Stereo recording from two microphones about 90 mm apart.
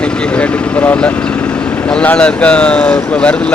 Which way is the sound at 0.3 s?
20° left (ahead or behind).